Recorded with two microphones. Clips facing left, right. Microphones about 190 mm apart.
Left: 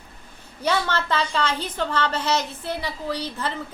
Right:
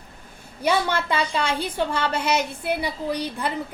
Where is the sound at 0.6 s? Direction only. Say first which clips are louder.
Right 2 dB; 10° right (ahead or behind).